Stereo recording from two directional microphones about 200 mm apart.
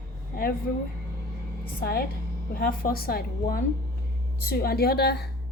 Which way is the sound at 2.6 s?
45° left (ahead or behind).